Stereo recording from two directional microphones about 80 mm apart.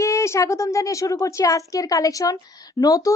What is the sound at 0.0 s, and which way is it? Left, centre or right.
A woman's voice, left.